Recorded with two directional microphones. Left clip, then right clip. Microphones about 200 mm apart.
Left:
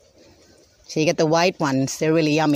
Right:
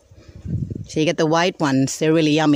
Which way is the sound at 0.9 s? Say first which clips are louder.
Even; 15° right (ahead or behind).